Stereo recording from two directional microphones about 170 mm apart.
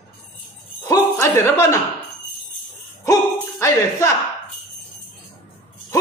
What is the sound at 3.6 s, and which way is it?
Music, 15° left (ahead or behind).